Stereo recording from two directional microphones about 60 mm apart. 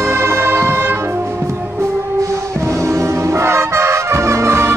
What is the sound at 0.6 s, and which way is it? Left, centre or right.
Music, right.